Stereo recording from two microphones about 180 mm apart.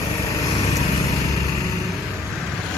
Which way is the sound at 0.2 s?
15° left (ahead or behind).